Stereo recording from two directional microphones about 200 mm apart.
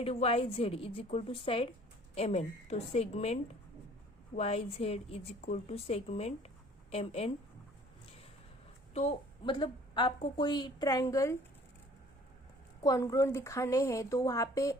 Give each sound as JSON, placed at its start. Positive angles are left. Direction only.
{"t": 0.0, "sound": "a woman's voice", "side_deg": 30}
{"t": 8.9, "sound": "a woman's voice", "side_deg": 30}
{"t": 12.8, "sound": "a woman's voice", "side_deg": 15}